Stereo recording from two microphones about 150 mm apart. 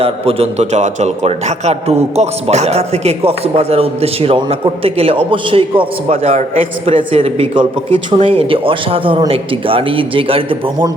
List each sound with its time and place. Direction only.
0.0 s a man's voice: 40° right (ahead or behind)